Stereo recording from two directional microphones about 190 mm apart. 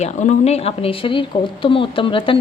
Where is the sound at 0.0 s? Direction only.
35° left (ahead or behind).